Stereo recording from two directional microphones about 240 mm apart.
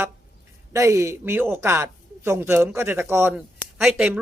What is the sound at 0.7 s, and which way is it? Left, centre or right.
Speech, centre.